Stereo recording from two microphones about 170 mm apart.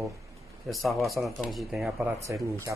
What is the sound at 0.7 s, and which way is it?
Speech, centre (ahead or behind).